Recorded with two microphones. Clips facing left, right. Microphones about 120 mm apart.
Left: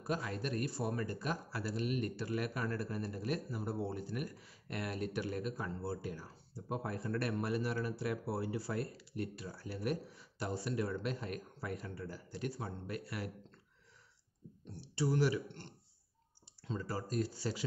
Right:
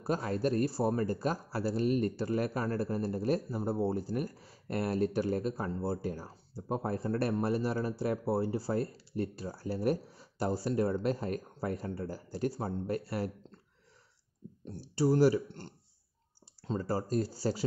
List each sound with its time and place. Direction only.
0.0 s speech: 35° right (ahead or behind)
14.6 s speech: 40° right (ahead or behind)